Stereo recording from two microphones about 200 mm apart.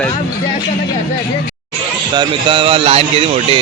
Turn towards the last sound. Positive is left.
turn(degrees=-30)  # may be behind; listen again after turning